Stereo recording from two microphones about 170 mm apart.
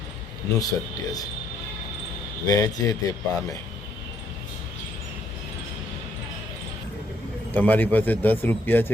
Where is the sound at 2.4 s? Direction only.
20° left (ahead or behind).